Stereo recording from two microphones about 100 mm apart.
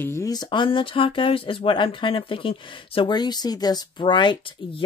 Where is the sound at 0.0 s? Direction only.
25° left (ahead or behind).